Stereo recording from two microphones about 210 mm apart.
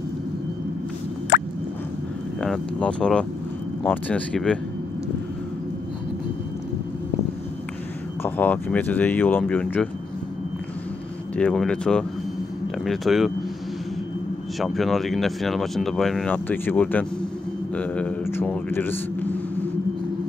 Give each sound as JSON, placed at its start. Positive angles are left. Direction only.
{"t": 1.3, "sound": "drip", "side_deg": 55}
{"t": 2.4, "sound": "speech", "side_deg": 5}
{"t": 8.2, "sound": "speech", "side_deg": 10}
{"t": 11.3, "sound": "speech", "side_deg": 5}
{"t": 14.6, "sound": "speech", "side_deg": 0}